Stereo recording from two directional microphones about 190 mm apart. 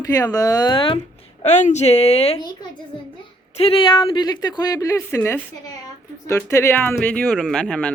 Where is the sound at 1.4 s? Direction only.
35° left (ahead or behind).